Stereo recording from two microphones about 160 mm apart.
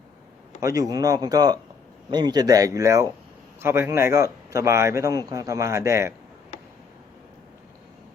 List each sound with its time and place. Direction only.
0.6 s a man's voice: 20° right (ahead or behind)